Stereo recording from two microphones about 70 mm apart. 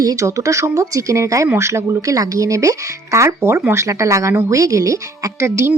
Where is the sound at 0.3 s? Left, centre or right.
Right.